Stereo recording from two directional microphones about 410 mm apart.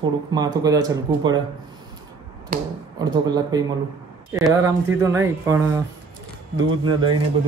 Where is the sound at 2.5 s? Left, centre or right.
Right.